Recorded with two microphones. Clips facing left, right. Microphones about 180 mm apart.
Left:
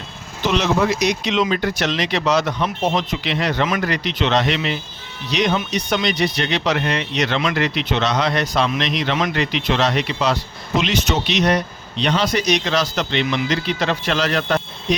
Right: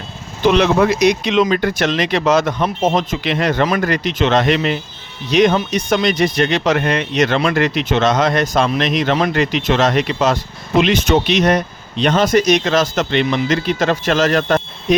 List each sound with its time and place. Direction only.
0.4 s speech: 60° right (ahead or behind)